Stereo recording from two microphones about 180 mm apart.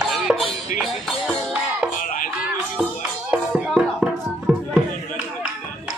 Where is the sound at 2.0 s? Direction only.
45° left (ahead or behind).